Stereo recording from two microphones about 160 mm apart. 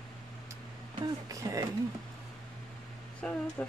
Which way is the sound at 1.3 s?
20° right (ahead or behind).